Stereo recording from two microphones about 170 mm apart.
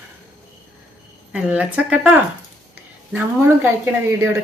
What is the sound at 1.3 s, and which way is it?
Speech, 10° right (ahead or behind).